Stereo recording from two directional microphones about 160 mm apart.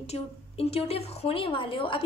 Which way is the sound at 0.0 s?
40° left (ahead or behind).